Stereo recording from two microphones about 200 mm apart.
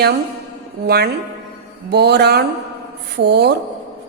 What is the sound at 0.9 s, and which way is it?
A woman's voice, 55° right (ahead or behind).